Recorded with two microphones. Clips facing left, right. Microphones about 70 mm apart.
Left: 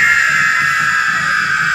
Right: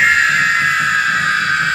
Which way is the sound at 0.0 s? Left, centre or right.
Centre.